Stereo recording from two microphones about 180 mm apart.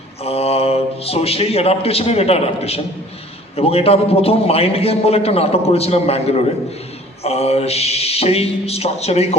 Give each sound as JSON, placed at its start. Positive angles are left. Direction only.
{"t": 0.3, "sound": "a man's voice", "side_deg": 35}